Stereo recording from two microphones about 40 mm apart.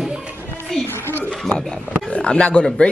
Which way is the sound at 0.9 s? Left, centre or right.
Left.